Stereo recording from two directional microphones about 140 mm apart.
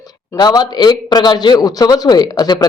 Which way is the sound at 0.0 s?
30° left (ahead or behind).